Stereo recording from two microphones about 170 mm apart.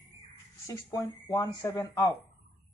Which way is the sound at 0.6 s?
20° left (ahead or behind).